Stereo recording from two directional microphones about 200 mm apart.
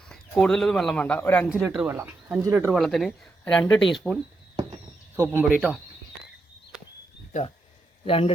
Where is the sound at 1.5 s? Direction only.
5° right (ahead or behind).